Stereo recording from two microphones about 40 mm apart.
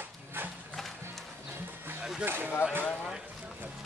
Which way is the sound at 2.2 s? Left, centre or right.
Right.